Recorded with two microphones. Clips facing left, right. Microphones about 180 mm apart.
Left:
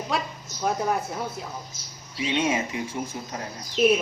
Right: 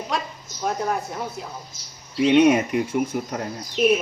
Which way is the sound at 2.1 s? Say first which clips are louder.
Right 9 dB; 65° right (ahead or behind).